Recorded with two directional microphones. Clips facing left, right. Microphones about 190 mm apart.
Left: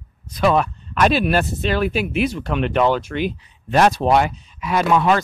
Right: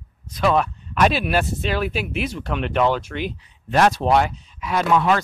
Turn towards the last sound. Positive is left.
turn(degrees=10)  # may be behind; listen again after turning